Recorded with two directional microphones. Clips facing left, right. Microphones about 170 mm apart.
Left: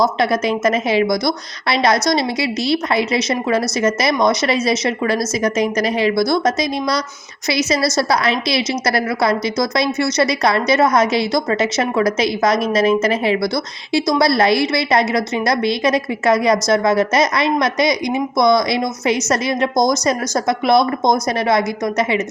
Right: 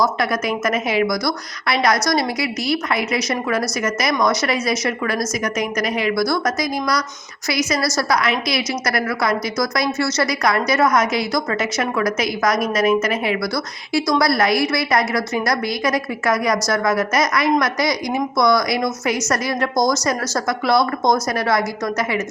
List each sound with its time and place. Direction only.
0.0 s a woman's voice: 25° left (ahead or behind)